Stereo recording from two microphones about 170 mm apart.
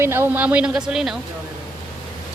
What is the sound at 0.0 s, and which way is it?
Speech, 15° right (ahead or behind).